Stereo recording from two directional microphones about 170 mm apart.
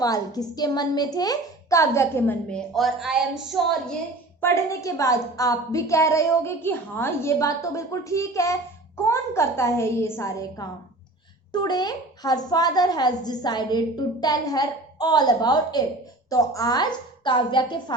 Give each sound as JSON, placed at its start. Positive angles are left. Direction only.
{"t": 0.0, "sound": "a woman's voice", "side_deg": 20}
{"t": 4.4, "sound": "a woman's voice", "side_deg": 15}